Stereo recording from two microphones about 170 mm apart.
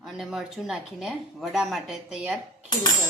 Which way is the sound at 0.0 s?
Centre (ahead or behind).